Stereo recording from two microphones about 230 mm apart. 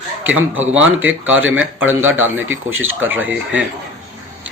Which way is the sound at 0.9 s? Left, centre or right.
Right.